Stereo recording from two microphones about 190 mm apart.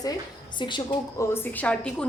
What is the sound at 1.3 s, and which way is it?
Speech, 10° left (ahead or behind).